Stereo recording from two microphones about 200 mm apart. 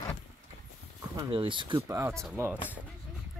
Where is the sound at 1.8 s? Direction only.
15° right (ahead or behind).